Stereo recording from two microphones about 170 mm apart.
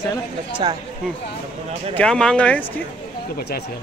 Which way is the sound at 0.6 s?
30° right (ahead or behind).